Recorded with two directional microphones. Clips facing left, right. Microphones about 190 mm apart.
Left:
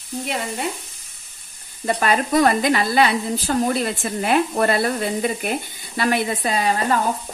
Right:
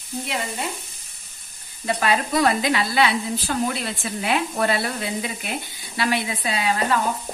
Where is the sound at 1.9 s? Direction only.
45° left (ahead or behind).